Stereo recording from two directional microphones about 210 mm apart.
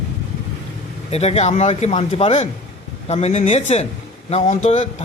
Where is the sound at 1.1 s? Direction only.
30° left (ahead or behind).